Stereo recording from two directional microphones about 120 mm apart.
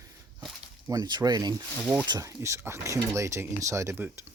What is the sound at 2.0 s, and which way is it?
Speech, 30° right (ahead or behind).